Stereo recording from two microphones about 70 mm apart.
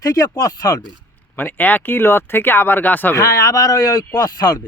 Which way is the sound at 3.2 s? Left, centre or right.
Left.